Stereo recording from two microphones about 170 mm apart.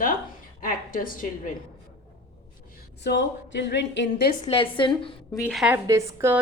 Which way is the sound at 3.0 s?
90° left.